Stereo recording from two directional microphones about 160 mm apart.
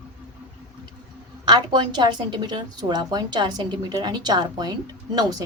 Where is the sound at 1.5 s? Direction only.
30° right (ahead or behind).